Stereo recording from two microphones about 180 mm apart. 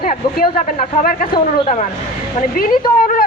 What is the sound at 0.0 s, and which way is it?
Speech, 45° left (ahead or behind).